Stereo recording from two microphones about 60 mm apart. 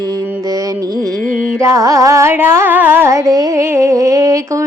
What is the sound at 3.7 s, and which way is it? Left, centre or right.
Humming, right.